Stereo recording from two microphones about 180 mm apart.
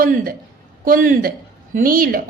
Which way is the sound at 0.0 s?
50° right (ahead or behind).